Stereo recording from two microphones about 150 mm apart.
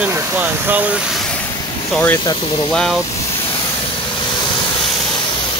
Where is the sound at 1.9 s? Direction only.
10° left (ahead or behind).